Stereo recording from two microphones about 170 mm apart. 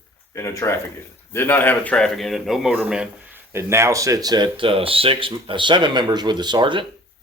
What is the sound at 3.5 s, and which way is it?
Speech, 15° right (ahead or behind).